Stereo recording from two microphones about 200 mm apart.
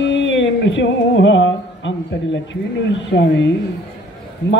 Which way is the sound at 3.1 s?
65° left (ahead or behind).